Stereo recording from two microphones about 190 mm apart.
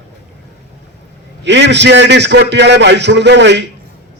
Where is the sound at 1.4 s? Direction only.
65° right (ahead or behind).